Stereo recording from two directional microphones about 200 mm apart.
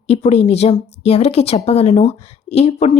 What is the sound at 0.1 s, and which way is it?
Speech, 30° left (ahead or behind).